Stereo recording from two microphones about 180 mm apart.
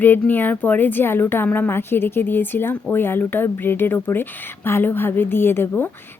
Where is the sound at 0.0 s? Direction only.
10° left (ahead or behind).